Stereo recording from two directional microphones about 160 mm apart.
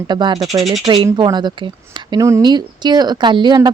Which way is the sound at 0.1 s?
30° right (ahead or behind).